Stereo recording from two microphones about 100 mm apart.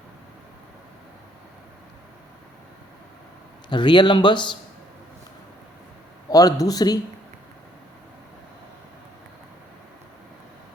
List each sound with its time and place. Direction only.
3.7 s speech: 50° left (ahead or behind)
6.3 s a man's voice: 40° left (ahead or behind)